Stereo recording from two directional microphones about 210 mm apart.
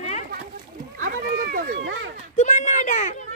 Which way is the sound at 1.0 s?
45° right (ahead or behind).